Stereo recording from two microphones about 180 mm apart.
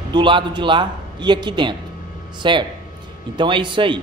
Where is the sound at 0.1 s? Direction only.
25° right (ahead or behind).